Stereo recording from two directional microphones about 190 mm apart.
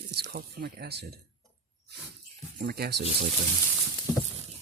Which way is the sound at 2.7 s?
55° right (ahead or behind).